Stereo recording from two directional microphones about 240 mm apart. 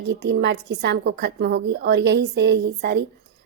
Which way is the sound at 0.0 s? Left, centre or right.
Right.